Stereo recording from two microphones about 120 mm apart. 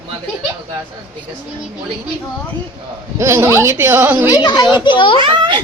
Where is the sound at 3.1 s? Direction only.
20° right (ahead or behind).